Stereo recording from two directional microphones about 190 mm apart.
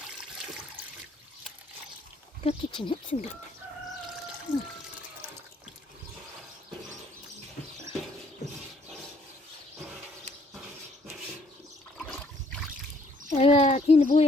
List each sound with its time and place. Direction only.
2.4 s speech: 30° left (ahead or behind)
4.5 s speech: 5° right (ahead or behind)
13.3 s a child's voice: 35° left (ahead or behind)